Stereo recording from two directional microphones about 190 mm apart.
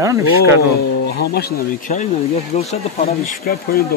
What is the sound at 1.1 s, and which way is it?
Speech, 55° left (ahead or behind).